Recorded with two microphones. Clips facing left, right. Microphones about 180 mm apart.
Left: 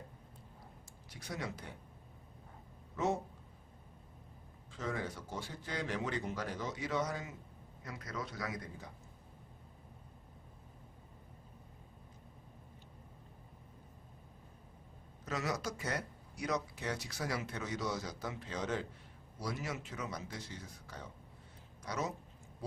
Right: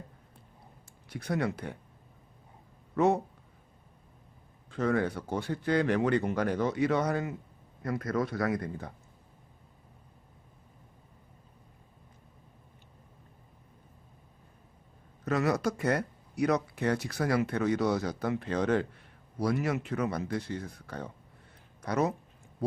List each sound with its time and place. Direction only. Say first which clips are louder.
1.1 s speech: right 11 dB; 60° right (ahead or behind)
2.9 s a man's voice: right 9 dB; 65° right (ahead or behind)
4.7 s speech: right 11 dB; 60° right (ahead or behind)
15.2 s speech: right 10 dB; 60° right (ahead or behind)